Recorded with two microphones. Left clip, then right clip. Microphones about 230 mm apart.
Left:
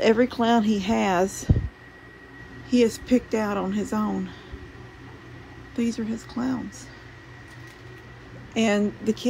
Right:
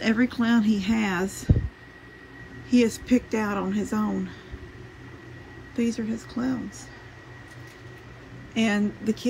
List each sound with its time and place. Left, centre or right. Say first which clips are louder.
0.0 s a woman's voice: left 5 dB; centre
2.7 s a woman's voice: left 1 dB; centre
5.8 s a woman's voice: even; centre
8.5 s a woman's voice: left 3 dB; centre